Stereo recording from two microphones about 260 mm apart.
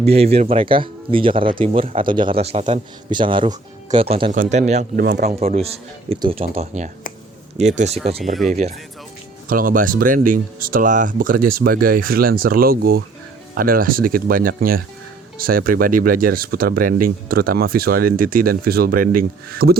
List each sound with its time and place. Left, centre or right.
0.0 s speech: right